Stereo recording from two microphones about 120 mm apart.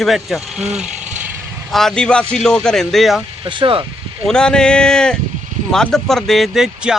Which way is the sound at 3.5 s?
45° right (ahead or behind).